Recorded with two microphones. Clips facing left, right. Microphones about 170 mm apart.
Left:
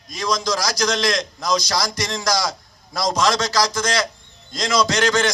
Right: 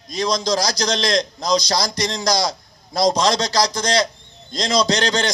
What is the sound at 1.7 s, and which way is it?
Speech, 20° right (ahead or behind).